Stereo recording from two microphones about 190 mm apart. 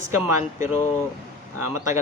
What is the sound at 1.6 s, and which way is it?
Speech, 15° right (ahead or behind).